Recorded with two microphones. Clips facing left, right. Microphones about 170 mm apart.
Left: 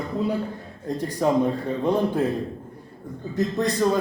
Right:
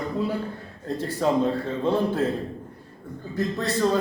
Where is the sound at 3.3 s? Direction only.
15° left (ahead or behind).